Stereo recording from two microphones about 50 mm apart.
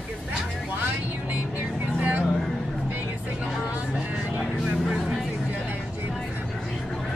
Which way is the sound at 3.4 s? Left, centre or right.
Right.